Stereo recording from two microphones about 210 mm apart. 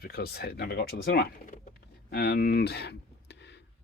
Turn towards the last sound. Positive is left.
turn(degrees=55)  # may be behind; listen again after turning